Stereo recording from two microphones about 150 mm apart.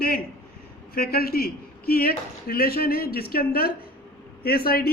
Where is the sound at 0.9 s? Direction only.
90° left.